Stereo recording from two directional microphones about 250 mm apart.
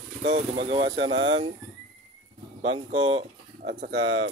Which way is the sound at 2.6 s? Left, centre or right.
Right.